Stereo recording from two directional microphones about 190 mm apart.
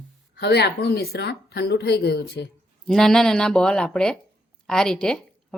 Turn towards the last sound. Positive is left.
turn(degrees=5)  # may be behind; listen again after turning